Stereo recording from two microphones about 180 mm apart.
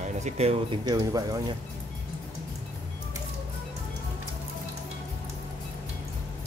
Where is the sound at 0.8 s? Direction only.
20° right (ahead or behind).